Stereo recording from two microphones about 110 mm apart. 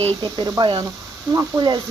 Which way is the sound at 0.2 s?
40° right (ahead or behind).